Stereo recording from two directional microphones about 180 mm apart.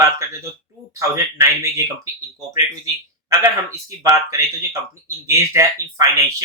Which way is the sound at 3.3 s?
15° right (ahead or behind).